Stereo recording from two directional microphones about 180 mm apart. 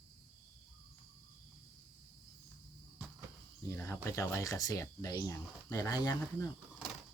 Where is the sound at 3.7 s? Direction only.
15° left (ahead or behind).